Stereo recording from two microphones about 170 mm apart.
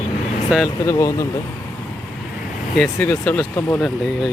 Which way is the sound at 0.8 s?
15° left (ahead or behind).